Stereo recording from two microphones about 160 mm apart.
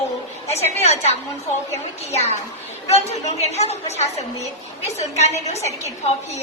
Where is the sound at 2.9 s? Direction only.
45° left (ahead or behind).